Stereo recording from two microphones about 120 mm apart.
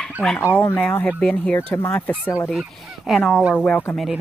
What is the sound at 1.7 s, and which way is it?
Speech, 20° left (ahead or behind).